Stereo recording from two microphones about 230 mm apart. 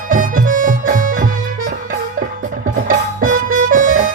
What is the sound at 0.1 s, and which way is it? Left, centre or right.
Music, right.